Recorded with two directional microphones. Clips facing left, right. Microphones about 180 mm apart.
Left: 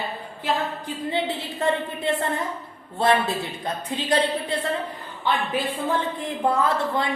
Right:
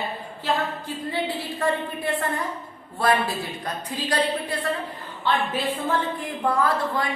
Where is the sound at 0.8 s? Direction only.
20° left (ahead or behind).